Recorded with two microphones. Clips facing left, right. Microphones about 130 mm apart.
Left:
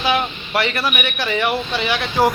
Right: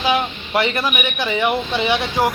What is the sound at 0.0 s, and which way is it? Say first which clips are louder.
A man's voice: right 1 dB; 20° right (ahead or behind).